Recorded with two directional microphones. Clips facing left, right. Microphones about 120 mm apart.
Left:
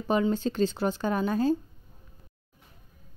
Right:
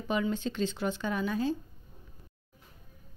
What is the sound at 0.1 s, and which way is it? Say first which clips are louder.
A woman's voice: left 5 dB; 40° left (ahead or behind).